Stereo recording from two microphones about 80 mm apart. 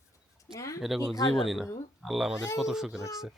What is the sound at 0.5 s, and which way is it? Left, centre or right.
Speech, left.